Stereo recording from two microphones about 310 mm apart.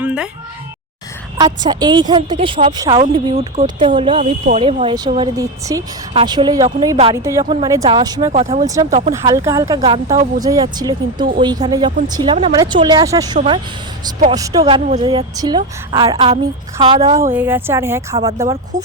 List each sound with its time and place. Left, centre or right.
0.0 s a sound: centre
1.4 s a woman's voice: centre
8.6 s a woman's voice: centre
9.1 s a woman's voice: centre